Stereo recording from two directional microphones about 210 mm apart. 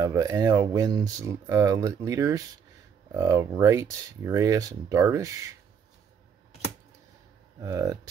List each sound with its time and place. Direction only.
0.0 s speech: 15° right (ahead or behind)
7.6 s speech: 15° right (ahead or behind)